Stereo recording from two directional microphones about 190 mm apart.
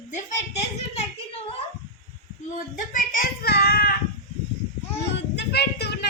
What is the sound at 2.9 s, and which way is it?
A child's voice, 45° left (ahead or behind).